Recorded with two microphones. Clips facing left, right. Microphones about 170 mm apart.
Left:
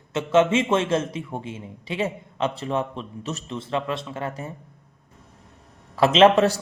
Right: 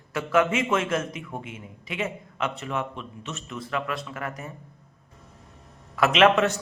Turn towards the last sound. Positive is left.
turn(degrees=30)  # may be behind; listen again after turning